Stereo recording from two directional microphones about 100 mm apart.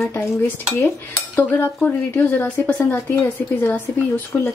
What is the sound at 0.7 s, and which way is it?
Speech, 20° left (ahead or behind).